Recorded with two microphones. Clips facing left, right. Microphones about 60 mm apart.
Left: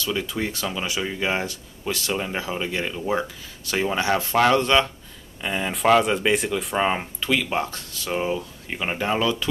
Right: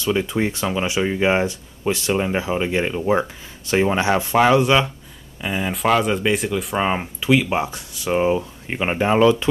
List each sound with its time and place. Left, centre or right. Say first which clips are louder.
0.0 s speech: right 6 dB; right